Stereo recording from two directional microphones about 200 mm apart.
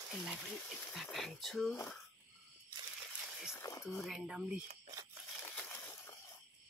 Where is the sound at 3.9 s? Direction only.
Centre (ahead or behind).